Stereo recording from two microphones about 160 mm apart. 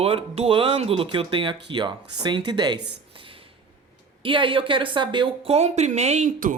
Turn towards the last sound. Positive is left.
turn(degrees=-50)  # may be behind; listen again after turning